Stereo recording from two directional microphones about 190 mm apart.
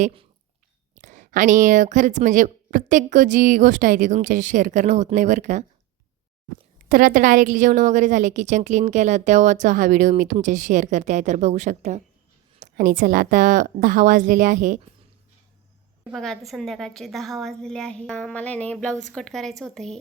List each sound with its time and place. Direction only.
0.0 s speech: 30° right (ahead or behind)
0.9 s a woman's voice: 40° right (ahead or behind)
6.8 s a woman's voice: 45° right (ahead or behind)
16.1 s a woman's voice: centre (ahead or behind)